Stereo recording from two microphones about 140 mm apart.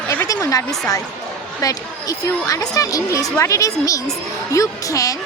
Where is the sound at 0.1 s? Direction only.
15° left (ahead or behind).